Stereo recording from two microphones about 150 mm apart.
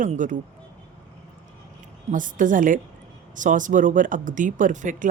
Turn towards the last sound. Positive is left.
turn(degrees=-60)  # may be behind; listen again after turning